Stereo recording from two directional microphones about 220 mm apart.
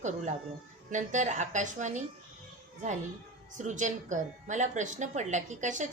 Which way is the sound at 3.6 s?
35° right (ahead or behind).